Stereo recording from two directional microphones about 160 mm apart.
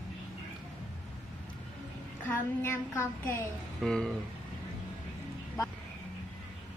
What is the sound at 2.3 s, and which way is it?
Child singing, 15° left (ahead or behind).